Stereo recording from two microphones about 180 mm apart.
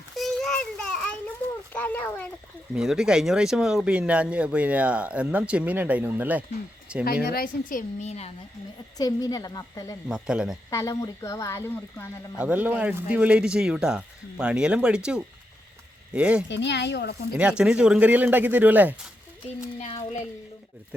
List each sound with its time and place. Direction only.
0.2 s child singing: centre (ahead or behind)
1.7 s speech: 10° left (ahead or behind)
2.7 s speech: 5° right (ahead or behind)
7.3 s a woman's voice: 55° left (ahead or behind); by 8.3 s 40° left (ahead or behind)
9.0 s a woman's voice: 20° left (ahead or behind)
10.1 s speech: 5° right (ahead or behind)
10.7 s speech: 15° left (ahead or behind)
12.4 s speech: 10° right (ahead or behind)
16.5 s speech: 75° left (ahead or behind)
17.3 s speech: 5° right (ahead or behind)
19.8 s speech: 35° left (ahead or behind)